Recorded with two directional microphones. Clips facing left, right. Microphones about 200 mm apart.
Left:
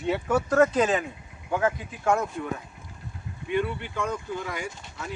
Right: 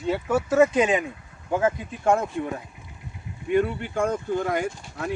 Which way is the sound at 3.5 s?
45° right (ahead or behind).